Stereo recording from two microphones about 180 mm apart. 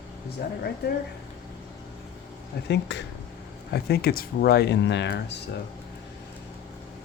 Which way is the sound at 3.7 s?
60° left (ahead or behind).